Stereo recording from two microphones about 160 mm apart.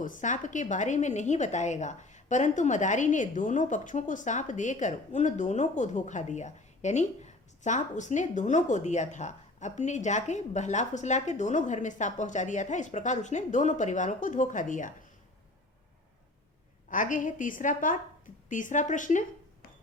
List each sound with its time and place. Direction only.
0.0 s a woman's voice: 50° left (ahead or behind)
16.9 s a woman's voice: 55° left (ahead or behind)